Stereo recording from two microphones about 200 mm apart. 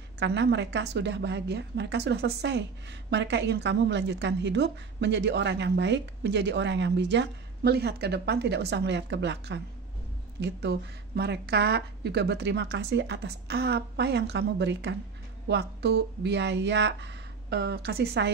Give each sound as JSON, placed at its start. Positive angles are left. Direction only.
{"t": 0.2, "sound": "a woman's voice", "side_deg": -60}